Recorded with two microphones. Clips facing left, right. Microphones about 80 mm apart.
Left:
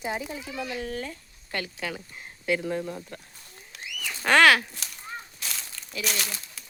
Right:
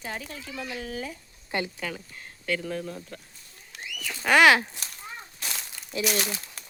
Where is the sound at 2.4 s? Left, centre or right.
Centre.